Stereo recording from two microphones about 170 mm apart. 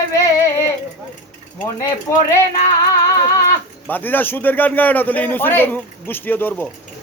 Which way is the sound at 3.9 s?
10° left (ahead or behind).